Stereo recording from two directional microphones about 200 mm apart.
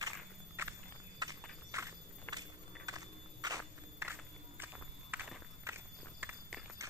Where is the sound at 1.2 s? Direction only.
20° right (ahead or behind).